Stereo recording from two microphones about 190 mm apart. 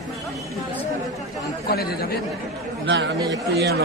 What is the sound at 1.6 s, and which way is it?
Speech, 55° left (ahead or behind).